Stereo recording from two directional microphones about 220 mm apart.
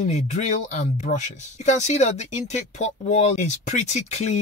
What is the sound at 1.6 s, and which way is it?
Speech, 30° left (ahead or behind).